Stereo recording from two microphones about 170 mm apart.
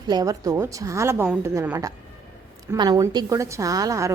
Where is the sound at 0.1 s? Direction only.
20° right (ahead or behind).